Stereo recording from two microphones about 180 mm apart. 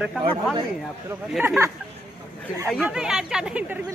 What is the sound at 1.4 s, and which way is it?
Speech, 10° right (ahead or behind).